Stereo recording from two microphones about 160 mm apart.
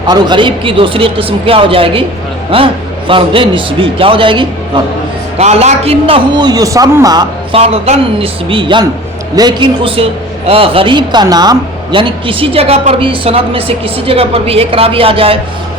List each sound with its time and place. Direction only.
0.1 s a man's voice: 30° right (ahead or behind)
5.4 s a man's voice: 45° right (ahead or behind); by 7.3 s 25° right (ahead or behind)
7.5 s a man's voice: 40° right (ahead or behind)